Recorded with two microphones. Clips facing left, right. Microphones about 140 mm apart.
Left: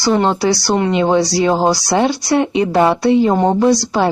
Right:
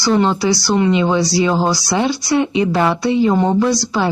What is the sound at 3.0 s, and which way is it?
A woman's voice, 50° left (ahead or behind).